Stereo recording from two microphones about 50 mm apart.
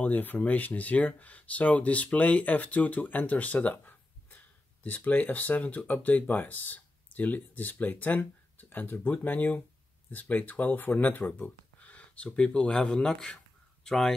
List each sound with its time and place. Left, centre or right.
0.0 s speech: left; by 14.1 s centre